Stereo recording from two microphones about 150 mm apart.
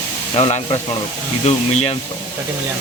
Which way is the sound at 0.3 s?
40° left (ahead or behind).